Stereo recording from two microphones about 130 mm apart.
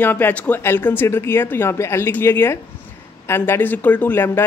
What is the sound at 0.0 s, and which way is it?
Speech, 15° left (ahead or behind).